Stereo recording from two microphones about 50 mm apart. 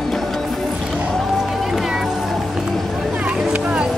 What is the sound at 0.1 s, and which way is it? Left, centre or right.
Music, centre.